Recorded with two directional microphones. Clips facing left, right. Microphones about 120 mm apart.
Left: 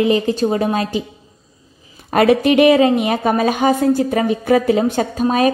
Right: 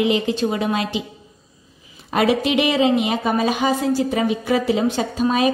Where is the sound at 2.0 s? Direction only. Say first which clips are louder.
Left 5 dB; 50° left (ahead or behind).